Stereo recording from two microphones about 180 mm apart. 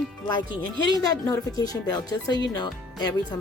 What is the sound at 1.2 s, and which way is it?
A woman's voice, 20° left (ahead or behind).